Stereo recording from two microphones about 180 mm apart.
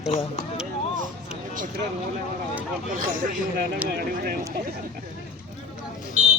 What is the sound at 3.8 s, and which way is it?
Speech, 10° right (ahead or behind).